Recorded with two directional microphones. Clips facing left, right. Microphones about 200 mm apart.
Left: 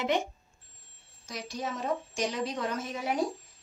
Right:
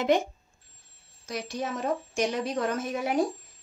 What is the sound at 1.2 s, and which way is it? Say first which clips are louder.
Speech: right 4 dB; 60° right (ahead or behind).